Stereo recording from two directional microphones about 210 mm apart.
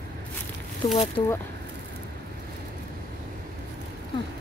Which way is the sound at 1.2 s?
25° left (ahead or behind).